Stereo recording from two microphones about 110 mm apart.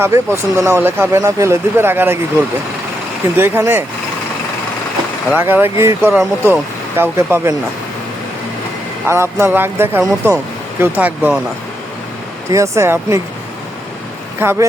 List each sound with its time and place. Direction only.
0.0 s speech: 25° right (ahead or behind)
3.3 s speech: 20° right (ahead or behind)
5.4 s speech: 20° right (ahead or behind)
9.0 s speech: 20° right (ahead or behind)
12.5 s speech: 30° right (ahead or behind)
14.3 s speech: 20° right (ahead or behind)